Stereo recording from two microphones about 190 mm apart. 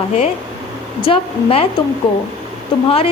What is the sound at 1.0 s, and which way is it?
Speech, 30° left (ahead or behind).